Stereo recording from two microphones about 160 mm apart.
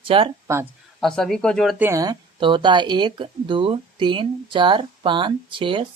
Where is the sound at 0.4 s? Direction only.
15° right (ahead or behind).